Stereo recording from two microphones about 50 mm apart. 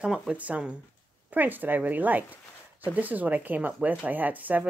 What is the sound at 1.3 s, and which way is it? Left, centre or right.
Speech, right.